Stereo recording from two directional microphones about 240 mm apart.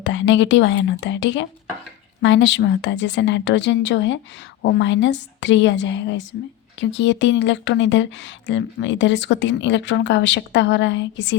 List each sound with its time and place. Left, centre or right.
0.0 s speech: left